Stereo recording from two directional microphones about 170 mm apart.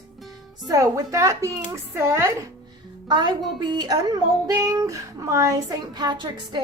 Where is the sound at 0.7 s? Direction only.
20° right (ahead or behind).